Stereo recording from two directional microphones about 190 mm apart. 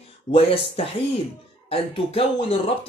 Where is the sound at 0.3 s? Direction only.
30° left (ahead or behind).